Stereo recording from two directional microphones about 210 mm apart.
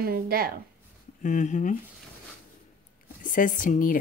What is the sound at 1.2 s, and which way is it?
Speech, 35° left (ahead or behind).